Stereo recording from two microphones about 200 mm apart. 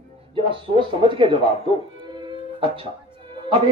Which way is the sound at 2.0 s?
25° right (ahead or behind).